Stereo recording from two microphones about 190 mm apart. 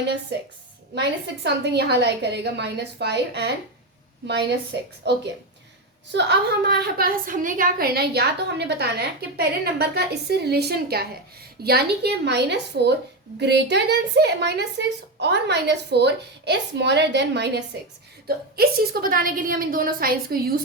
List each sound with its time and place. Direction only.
1.5 s a woman's voice: 65° right (ahead or behind)
18.3 s a woman's voice: 55° right (ahead or behind)